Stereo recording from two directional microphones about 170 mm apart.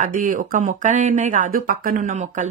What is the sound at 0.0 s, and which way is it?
Speech, 50° right (ahead or behind).